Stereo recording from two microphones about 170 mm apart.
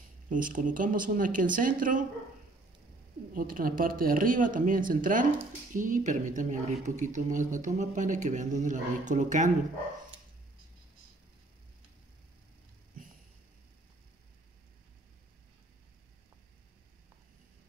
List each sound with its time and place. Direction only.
0.3 s speech: 50° right (ahead or behind)
3.3 s speech: 55° right (ahead or behind)